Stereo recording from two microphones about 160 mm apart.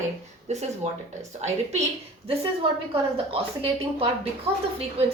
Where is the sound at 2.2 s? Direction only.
35° right (ahead or behind).